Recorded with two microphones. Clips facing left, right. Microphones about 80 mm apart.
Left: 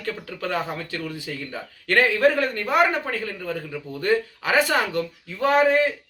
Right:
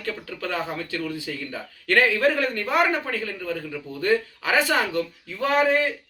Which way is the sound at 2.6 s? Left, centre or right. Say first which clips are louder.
Left 2 dB; centre.